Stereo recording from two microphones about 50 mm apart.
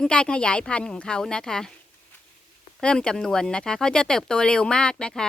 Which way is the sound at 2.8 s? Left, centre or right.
Left.